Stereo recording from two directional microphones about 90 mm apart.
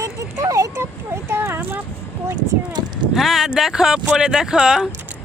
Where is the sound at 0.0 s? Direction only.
40° right (ahead or behind).